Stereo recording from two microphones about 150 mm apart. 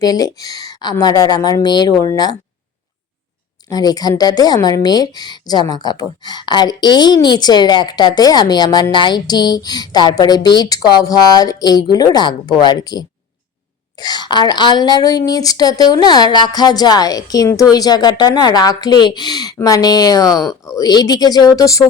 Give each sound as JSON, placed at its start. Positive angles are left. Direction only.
{"t": 0.0, "sound": "speech", "side_deg": 25}
{"t": 3.7, "sound": "speech", "side_deg": 25}